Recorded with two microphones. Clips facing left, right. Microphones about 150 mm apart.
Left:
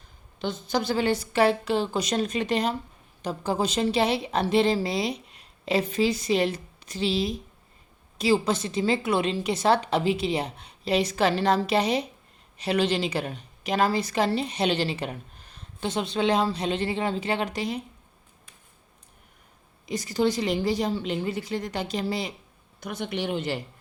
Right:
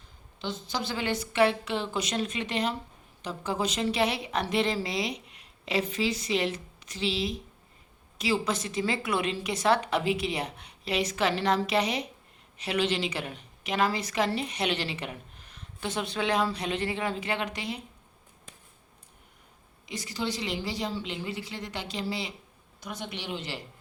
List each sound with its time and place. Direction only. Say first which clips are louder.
0.3 s a woman's voice: left 6 dB; 50° left (ahead or behind)
19.8 s a woman's voice: left 9 dB; 45° left (ahead or behind)
22.8 s a woman's voice: left 7 dB; 55° left (ahead or behind)